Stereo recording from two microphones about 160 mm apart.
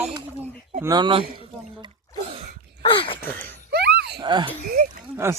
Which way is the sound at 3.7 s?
90° right.